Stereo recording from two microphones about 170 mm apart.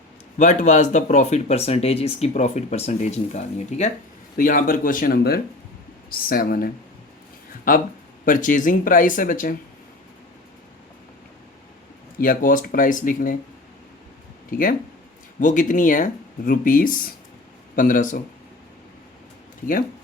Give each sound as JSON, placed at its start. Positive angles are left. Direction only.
{"t": 0.3, "sound": "speech", "side_deg": 45}
{"t": 4.4, "sound": "speech", "side_deg": 55}
{"t": 7.7, "sound": "speech", "side_deg": 55}
{"t": 12.1, "sound": "speech", "side_deg": 55}
{"t": 15.4, "sound": "speech", "side_deg": 50}